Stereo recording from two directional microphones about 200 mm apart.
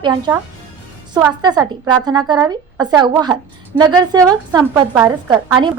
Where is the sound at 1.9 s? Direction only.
20° right (ahead or behind).